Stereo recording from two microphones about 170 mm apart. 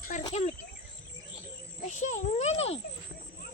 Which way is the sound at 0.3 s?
40° left (ahead or behind).